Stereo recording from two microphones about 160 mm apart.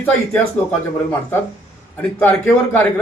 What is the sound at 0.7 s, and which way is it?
Speech, 15° left (ahead or behind).